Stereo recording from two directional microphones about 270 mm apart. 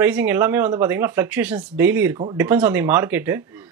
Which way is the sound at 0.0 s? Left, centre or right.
Centre.